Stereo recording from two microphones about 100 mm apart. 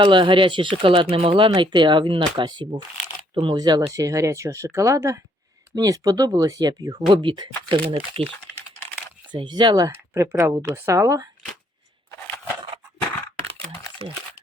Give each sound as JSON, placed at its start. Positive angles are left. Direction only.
{"t": 0.0, "sound": "speech", "side_deg": -55}
{"t": 3.3, "sound": "speech", "side_deg": -60}
{"t": 3.6, "sound": "speech", "side_deg": -45}
{"t": 7.1, "sound": "speech", "side_deg": -55}
{"t": 9.3, "sound": "speech", "side_deg": -50}
{"t": 9.9, "sound": "speech", "side_deg": -25}